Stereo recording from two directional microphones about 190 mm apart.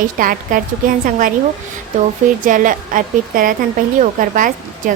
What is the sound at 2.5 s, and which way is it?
A woman's voice, 45° right (ahead or behind).